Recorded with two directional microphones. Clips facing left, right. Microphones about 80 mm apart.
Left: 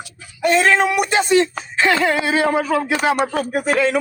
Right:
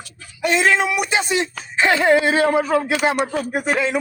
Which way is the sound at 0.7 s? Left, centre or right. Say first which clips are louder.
Left 2 dB; left.